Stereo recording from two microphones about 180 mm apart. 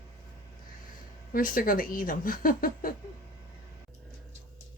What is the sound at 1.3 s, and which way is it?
A woman's voice, 50° left (ahead or behind).